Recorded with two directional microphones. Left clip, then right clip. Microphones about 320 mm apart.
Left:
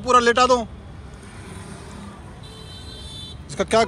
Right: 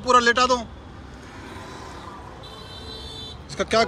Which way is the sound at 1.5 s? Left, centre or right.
Right.